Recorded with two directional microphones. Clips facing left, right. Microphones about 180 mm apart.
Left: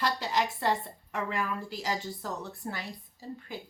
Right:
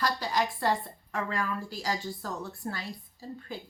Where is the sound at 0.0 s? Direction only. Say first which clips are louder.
Even; 25° left (ahead or behind).